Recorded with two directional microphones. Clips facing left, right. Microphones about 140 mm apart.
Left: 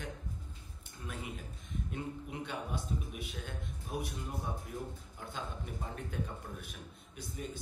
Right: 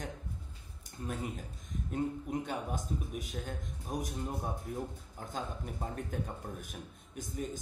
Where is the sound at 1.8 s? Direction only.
40° right (ahead or behind).